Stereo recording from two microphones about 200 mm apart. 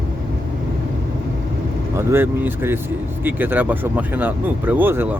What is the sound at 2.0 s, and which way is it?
Speech, 10° right (ahead or behind).